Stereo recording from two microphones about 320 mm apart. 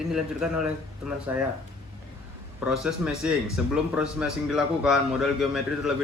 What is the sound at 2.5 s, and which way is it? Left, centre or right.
A man's voice, centre.